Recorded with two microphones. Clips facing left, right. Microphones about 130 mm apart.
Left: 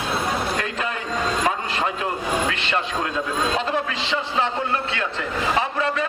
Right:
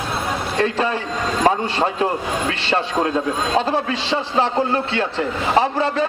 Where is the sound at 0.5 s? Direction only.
30° right (ahead or behind).